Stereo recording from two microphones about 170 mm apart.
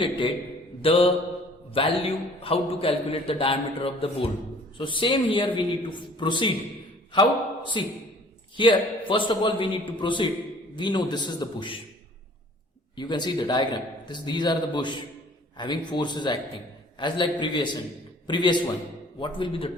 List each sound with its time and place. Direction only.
0.0 s a man's voice: 30° left (ahead or behind)
13.0 s a man's voice: 25° left (ahead or behind)